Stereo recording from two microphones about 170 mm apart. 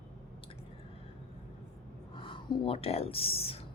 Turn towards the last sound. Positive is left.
turn(degrees=35)  # may be behind; listen again after turning